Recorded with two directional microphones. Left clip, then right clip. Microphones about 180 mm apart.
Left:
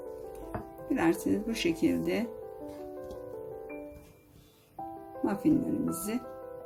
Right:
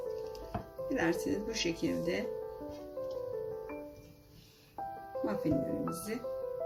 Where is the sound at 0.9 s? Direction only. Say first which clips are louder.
Left 4 dB; 50° left (ahead or behind).